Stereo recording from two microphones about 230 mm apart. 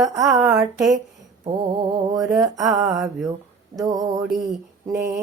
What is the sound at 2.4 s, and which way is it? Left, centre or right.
Music, centre.